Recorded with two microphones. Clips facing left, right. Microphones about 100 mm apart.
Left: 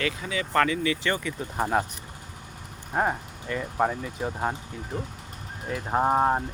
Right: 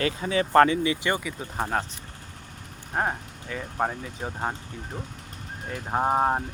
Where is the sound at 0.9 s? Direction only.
20° right (ahead or behind).